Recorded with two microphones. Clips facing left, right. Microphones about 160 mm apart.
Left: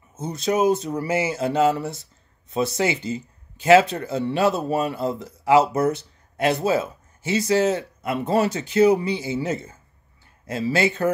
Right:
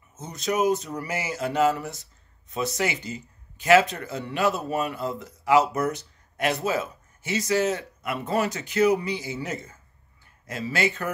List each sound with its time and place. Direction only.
0.1 s speech: 30° left (ahead or behind)